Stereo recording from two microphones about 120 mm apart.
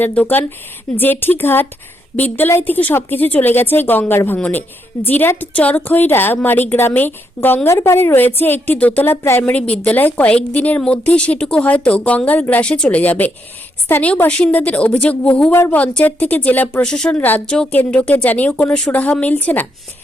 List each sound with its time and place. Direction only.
0.0 s a woman's voice: 15° left (ahead or behind)